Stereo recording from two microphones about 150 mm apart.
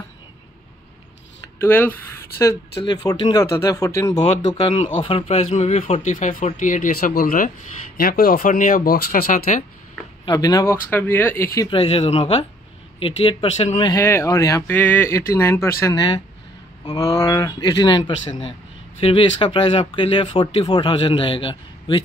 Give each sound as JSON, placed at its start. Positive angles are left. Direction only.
{"t": 1.6, "sound": "speech", "side_deg": 15}
{"t": 2.8, "sound": "speech", "side_deg": 25}
{"t": 4.2, "sound": "speech", "side_deg": 40}
{"t": 8.0, "sound": "speech", "side_deg": 80}
{"t": 10.2, "sound": "speech", "side_deg": 25}
{"t": 10.9, "sound": "speech", "side_deg": 15}
{"t": 11.6, "sound": "speech", "side_deg": 40}
{"t": 13.9, "sound": "speech", "side_deg": 20}
{"t": 15.8, "sound": "speech", "side_deg": 30}